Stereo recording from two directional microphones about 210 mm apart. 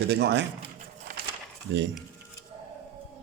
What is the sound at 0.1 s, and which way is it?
Speech, 50° right (ahead or behind).